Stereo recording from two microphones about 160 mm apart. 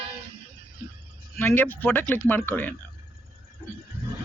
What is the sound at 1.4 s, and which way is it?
A man's voice, 15° left (ahead or behind).